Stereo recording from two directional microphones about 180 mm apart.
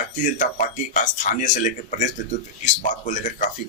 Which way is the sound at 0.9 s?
45° left (ahead or behind).